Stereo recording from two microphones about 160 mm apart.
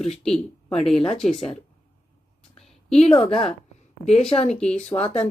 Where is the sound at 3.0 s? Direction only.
35° left (ahead or behind).